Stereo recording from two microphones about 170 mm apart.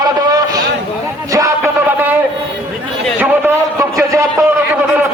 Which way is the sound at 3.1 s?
10° right (ahead or behind).